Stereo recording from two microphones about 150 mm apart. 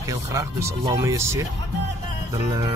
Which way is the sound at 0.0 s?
20° right (ahead or behind).